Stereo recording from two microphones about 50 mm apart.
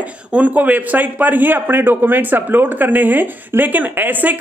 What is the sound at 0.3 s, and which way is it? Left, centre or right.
A man's voice, right.